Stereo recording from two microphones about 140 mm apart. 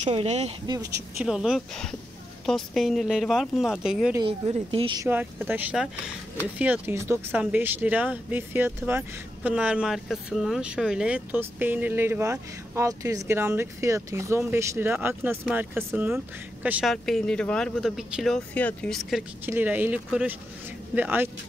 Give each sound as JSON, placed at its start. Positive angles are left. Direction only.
{"t": 0.0, "sound": "speech", "side_deg": -50}
{"t": 0.7, "sound": "speech", "side_deg": -25}
{"t": 1.2, "sound": "speech", "side_deg": -5}
{"t": 4.2, "sound": "speech", "side_deg": -40}
{"t": 5.0, "sound": "speech", "side_deg": -15}
{"t": 16.8, "sound": "speech", "side_deg": 0}
{"t": 19.4, "sound": "speech", "side_deg": -15}